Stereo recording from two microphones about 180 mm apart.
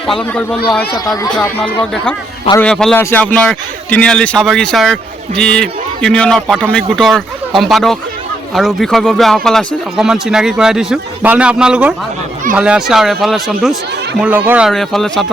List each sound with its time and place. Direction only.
0.1 s speech: 5° left (ahead or behind)
0.9 s speech: 20° left (ahead or behind)
1.3 s speech: 5° left (ahead or behind)
14.7 s speech: 5° left (ahead or behind)